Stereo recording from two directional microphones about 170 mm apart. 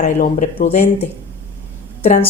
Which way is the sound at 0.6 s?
35° left (ahead or behind).